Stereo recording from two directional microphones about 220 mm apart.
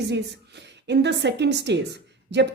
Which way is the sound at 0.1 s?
50° right (ahead or behind).